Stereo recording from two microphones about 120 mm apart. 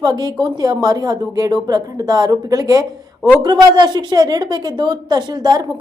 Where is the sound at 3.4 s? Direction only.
35° right (ahead or behind).